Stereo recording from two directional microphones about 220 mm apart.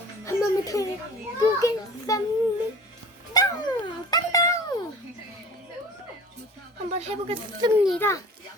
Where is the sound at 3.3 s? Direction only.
15° left (ahead or behind).